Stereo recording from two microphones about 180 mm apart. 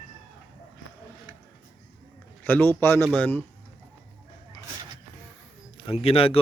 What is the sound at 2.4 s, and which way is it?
Speech, 10° left (ahead or behind).